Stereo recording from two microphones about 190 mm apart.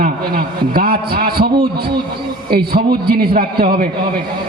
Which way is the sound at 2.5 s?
55° right (ahead or behind).